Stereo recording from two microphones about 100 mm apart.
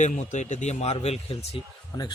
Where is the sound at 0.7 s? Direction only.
90° left.